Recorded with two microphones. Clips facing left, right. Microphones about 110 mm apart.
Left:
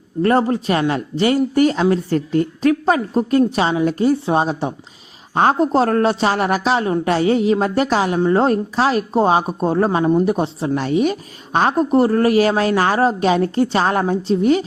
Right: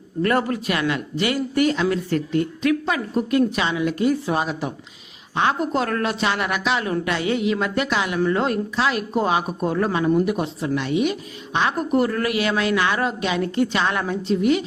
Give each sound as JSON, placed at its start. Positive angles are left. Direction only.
{"t": 0.2, "sound": "a woman's voice", "side_deg": 30}
{"t": 5.3, "sound": "a woman's voice", "side_deg": 40}